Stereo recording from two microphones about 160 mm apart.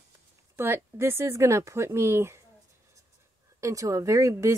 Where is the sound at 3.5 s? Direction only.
20° right (ahead or behind).